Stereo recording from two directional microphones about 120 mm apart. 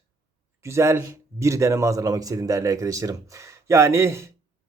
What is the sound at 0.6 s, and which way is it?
A man's voice, 25° right (ahead or behind).